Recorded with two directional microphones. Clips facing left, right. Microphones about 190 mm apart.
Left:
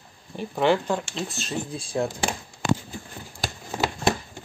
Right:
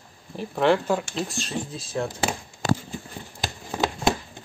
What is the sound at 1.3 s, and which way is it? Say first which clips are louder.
Speech: even; 10° left (ahead or behind).